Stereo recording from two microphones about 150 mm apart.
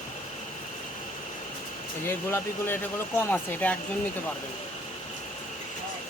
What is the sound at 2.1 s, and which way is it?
Speech, 15° left (ahead or behind).